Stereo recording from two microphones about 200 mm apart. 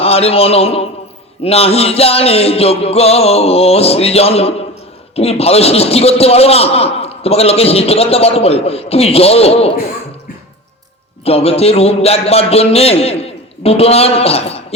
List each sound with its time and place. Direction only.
0.0 s a man's voice: 30° left (ahead or behind)
11.3 s a man's voice: 30° left (ahead or behind)